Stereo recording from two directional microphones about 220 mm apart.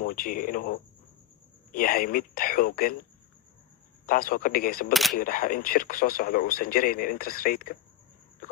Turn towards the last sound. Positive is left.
turn(degrees=40)  # may be behind; listen again after turning